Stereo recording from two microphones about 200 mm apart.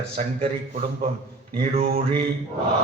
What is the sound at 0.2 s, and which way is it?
Speech, 40° right (ahead or behind).